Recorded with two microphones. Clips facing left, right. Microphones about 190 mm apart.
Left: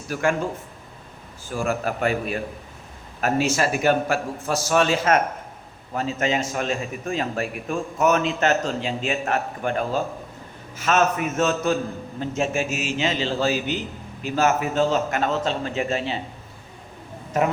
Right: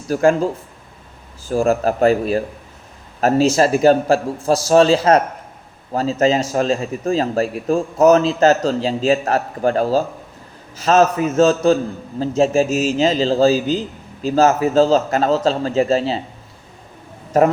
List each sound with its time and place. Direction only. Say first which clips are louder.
0.1 s a man's voice: right 8 dB; 35° right (ahead or behind)
1.5 s a man's voice: right 8 dB; 40° right (ahead or behind)